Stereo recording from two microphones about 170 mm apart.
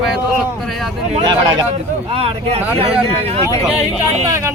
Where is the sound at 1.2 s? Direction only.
25° right (ahead or behind).